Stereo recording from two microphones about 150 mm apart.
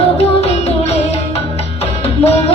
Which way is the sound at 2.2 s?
40° left (ahead or behind).